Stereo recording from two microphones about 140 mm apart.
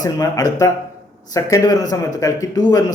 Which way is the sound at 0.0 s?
25° left (ahead or behind).